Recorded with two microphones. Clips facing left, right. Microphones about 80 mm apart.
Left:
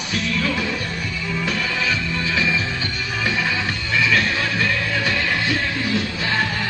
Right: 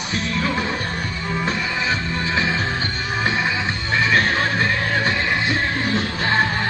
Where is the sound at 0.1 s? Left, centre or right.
Right.